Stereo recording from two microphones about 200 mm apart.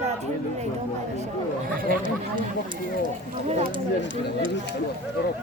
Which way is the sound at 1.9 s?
45° right (ahead or behind).